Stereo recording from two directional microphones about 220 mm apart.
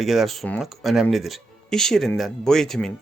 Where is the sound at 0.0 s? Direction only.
Centre (ahead or behind).